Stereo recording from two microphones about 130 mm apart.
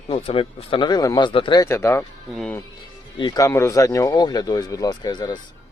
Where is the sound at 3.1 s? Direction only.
35° left (ahead or behind).